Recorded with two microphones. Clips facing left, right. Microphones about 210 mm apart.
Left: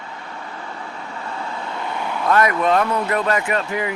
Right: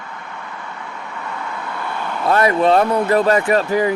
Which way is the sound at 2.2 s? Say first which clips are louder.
Right 3 dB; 30° right (ahead or behind).